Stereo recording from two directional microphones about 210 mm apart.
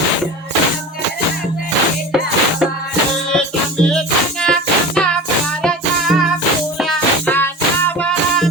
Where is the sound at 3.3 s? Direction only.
5° left (ahead or behind).